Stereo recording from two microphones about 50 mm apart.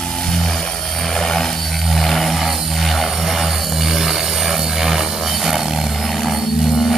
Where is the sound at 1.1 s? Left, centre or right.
Centre.